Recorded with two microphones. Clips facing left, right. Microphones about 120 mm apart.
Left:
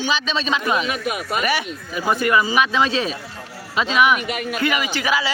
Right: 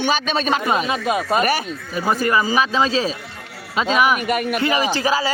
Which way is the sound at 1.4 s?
45° right (ahead or behind).